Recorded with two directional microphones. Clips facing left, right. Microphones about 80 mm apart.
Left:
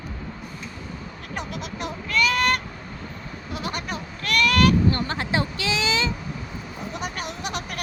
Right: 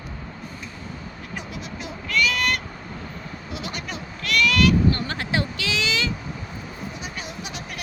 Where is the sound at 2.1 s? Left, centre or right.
Left.